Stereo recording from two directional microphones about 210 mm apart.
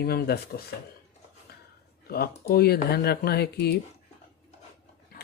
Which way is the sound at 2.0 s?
45° left (ahead or behind).